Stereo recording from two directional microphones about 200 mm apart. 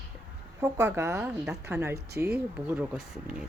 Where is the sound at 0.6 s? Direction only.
15° right (ahead or behind).